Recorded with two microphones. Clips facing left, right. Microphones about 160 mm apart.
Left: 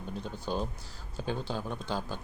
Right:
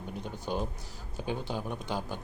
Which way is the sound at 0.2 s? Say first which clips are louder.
Even; 15° right (ahead or behind).